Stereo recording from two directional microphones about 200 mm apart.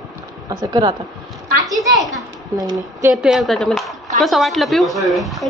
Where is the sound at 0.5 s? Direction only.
20° right (ahead or behind).